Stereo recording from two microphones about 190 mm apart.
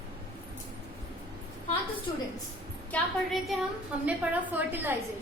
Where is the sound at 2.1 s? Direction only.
20° left (ahead or behind).